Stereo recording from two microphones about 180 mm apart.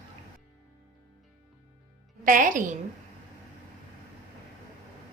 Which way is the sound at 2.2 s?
45° right (ahead or behind).